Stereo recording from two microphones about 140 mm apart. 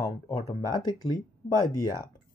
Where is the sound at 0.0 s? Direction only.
30° left (ahead or behind).